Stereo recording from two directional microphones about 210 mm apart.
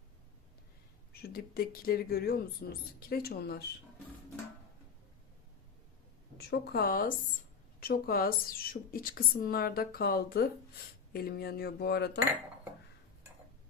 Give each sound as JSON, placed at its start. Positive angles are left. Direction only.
{"t": 1.1, "sound": "speech", "side_deg": 45}
{"t": 6.3, "sound": "speech", "side_deg": 50}